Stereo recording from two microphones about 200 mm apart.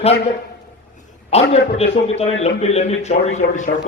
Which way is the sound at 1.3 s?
30° left (ahead or behind).